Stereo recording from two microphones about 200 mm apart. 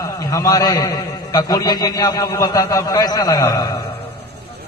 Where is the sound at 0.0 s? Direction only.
15° left (ahead or behind).